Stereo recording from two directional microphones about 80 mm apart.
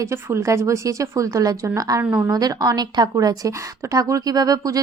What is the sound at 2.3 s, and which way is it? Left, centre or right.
A woman's voice, right.